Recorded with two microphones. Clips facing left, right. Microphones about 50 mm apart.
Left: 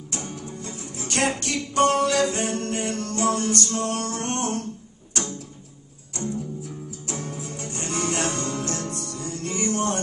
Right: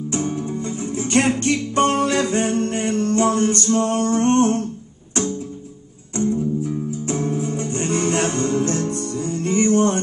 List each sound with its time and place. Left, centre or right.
0.1 s music: right
6.1 s music: right